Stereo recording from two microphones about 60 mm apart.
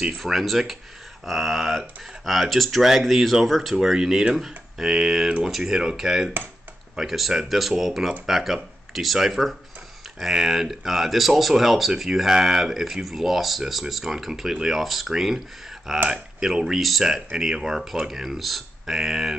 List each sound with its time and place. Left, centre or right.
0.2 s speech: centre